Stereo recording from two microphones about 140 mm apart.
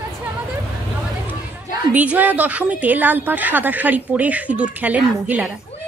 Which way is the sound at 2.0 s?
10° right (ahead or behind).